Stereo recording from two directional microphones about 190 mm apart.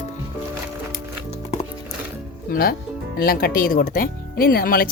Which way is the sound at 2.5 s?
50° left (ahead or behind).